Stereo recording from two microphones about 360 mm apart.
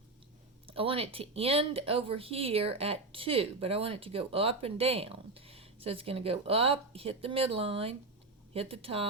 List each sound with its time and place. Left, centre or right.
0.7 s speech: centre